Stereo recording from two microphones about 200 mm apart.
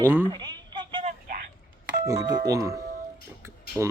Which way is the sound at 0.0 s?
10° right (ahead or behind).